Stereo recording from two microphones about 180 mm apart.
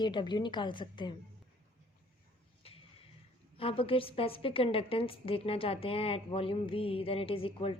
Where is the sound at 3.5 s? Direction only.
30° left (ahead or behind).